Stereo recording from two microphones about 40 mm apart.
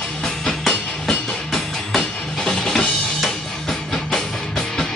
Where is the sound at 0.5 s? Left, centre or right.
Centre.